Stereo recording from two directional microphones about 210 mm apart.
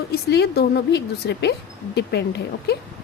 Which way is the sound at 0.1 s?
50° left (ahead or behind).